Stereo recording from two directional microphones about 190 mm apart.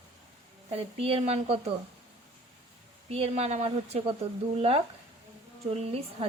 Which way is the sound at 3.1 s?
30° right (ahead or behind).